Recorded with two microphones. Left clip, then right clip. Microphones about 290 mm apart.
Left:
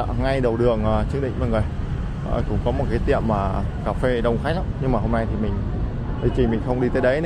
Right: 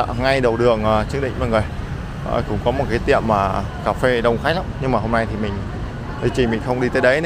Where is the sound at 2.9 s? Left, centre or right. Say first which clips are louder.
Right 5 dB; centre.